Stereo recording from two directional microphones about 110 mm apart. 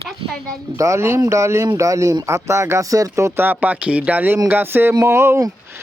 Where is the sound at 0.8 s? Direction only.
25° right (ahead or behind).